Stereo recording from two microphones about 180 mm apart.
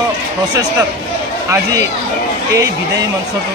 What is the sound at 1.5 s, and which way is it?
Speech, 20° right (ahead or behind).